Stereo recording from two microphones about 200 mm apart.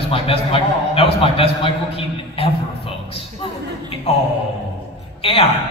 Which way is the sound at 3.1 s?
30° left (ahead or behind).